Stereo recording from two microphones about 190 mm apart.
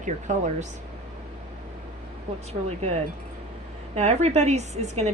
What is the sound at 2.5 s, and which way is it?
A woman's voice, 35° right (ahead or behind).